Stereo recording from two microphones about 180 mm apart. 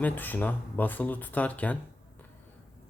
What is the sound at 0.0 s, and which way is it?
Speech, 10° left (ahead or behind).